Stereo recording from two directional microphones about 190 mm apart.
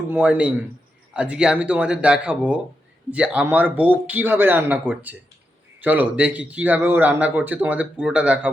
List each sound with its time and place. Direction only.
0.1 s speech: 10° right (ahead or behind)